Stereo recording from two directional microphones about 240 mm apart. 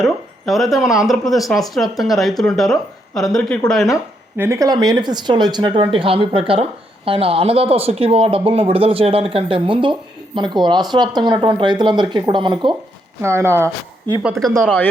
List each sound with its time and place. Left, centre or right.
0.0 s speech: centre
14.6 s speech: centre